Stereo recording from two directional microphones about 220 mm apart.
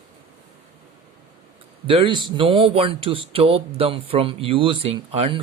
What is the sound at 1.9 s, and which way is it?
Speech, 25° right (ahead or behind).